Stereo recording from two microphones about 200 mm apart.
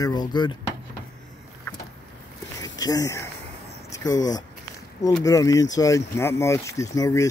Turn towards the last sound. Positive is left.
turn(degrees=15)  # may be behind; listen again after turning